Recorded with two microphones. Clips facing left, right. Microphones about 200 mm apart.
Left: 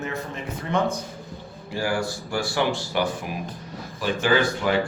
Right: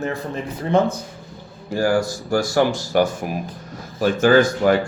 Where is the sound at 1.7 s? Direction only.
45° right (ahead or behind).